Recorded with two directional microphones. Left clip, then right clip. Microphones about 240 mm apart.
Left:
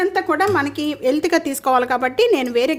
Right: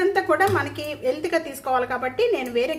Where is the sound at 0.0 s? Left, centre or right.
Left.